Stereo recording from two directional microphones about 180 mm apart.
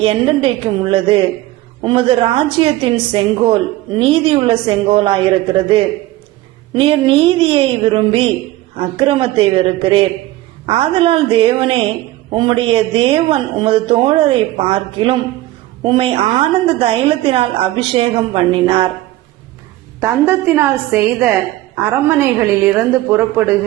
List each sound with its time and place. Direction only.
0.0 s a woman's voice: 30° right (ahead or behind)
20.0 s a woman's voice: 15° right (ahead or behind)